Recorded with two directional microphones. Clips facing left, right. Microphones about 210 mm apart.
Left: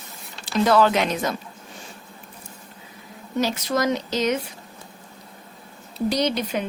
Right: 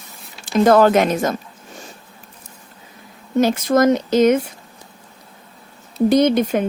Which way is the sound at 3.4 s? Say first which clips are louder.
Right 8 dB; 50° right (ahead or behind).